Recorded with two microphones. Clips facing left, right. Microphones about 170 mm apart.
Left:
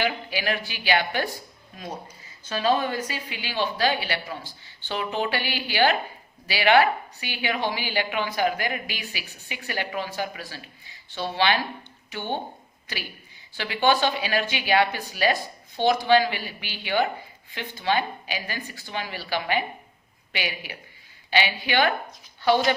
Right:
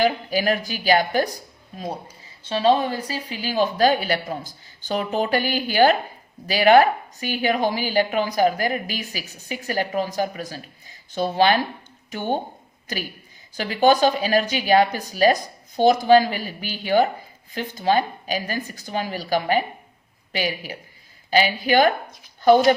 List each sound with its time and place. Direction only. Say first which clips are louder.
0.0 s speech: right 6 dB; 40° right (ahead or behind)